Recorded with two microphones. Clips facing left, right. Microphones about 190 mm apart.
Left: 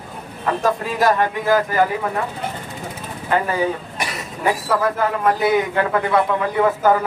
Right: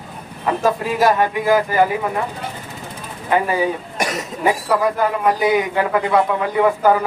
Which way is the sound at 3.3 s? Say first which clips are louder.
Right 2 dB; 15° right (ahead or behind).